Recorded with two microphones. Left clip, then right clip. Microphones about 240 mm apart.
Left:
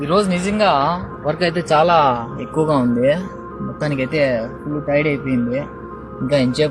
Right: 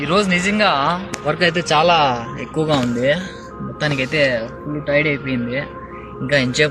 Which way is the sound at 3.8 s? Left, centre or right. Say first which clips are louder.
Right 1 dB; centre.